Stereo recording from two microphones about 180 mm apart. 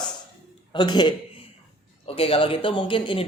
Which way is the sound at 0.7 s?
25° left (ahead or behind).